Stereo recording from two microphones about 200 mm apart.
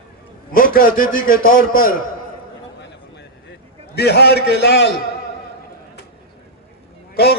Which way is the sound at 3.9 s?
55° left (ahead or behind).